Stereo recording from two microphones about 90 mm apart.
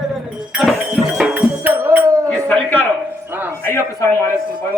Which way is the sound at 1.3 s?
20° right (ahead or behind).